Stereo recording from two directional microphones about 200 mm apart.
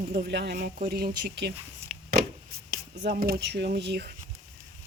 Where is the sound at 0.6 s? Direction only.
40° right (ahead or behind); by 1.5 s 55° right (ahead or behind).